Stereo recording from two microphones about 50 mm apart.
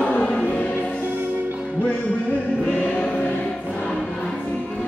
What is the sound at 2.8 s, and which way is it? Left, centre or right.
Music, left.